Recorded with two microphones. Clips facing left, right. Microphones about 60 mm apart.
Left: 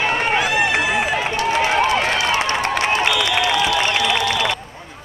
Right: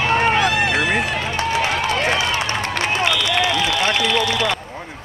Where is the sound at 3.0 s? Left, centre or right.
Centre.